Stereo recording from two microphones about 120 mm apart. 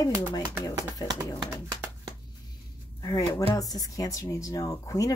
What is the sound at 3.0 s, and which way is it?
Speech, 35° left (ahead or behind).